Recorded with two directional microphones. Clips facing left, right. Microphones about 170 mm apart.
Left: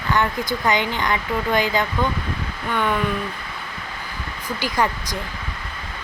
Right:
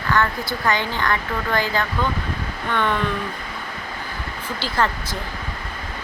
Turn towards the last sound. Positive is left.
turn(degrees=15)  # may be behind; listen again after turning